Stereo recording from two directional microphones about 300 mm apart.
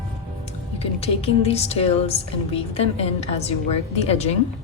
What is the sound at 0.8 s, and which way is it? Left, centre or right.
Speech, centre.